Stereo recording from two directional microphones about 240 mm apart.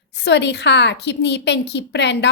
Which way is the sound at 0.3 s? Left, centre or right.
Left.